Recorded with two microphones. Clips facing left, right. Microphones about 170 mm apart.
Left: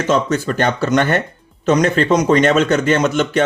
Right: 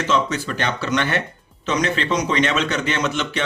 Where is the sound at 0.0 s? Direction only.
45° left (ahead or behind).